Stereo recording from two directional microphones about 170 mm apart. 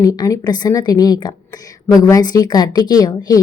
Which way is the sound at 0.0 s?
20° left (ahead or behind).